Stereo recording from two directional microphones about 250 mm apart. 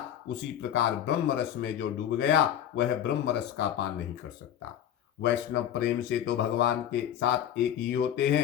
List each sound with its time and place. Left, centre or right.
0.7 s speech: left
5.2 s speech: left